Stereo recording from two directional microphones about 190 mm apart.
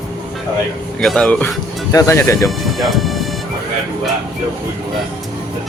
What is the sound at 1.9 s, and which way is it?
Speech, 15° left (ahead or behind).